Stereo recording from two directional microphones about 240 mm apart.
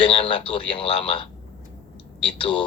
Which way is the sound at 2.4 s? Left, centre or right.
Centre.